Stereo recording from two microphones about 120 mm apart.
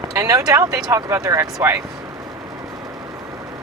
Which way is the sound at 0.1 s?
25° right (ahead or behind).